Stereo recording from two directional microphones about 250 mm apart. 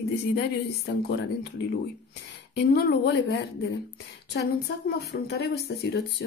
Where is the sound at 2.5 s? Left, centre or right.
Left.